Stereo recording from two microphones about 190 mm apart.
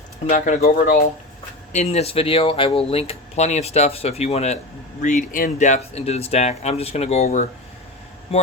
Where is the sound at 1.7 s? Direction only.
35° left (ahead or behind).